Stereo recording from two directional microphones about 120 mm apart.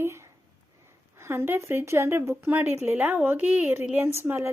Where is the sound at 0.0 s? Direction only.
20° right (ahead or behind).